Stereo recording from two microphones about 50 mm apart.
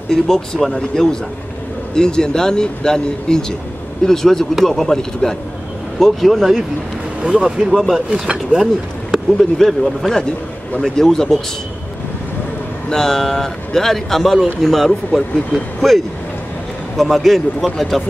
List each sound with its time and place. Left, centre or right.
0.1 s speech: centre
7.2 s speech: centre
9.4 s speech: centre
12.9 s speech: centre